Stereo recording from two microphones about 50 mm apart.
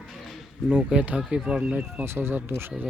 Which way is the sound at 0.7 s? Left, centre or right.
Right.